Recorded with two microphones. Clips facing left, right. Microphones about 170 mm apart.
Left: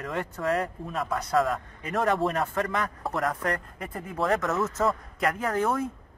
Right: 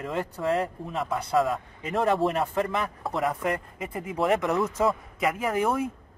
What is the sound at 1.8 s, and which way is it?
Speech, 25° right (ahead or behind).